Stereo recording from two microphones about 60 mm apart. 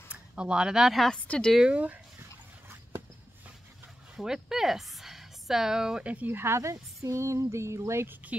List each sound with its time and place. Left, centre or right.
0.1 s speech: centre
1.2 s a woman's voice: centre
1.6 s speech: right
4.2 s speech: centre
6.0 s speech: right
6.3 s speech: right